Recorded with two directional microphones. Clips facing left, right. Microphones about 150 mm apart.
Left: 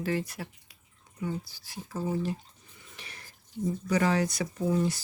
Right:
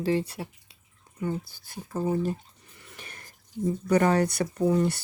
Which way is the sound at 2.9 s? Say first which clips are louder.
Right 3 dB; 45° right (ahead or behind).